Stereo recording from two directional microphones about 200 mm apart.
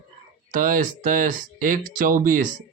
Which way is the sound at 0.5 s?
40° right (ahead or behind).